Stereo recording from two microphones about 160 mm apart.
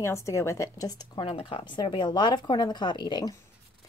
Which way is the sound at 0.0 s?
20° left (ahead or behind).